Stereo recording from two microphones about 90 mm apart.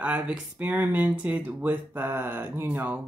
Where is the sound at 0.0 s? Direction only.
10° right (ahead or behind).